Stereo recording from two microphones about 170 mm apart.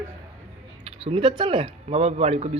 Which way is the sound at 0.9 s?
35° right (ahead or behind).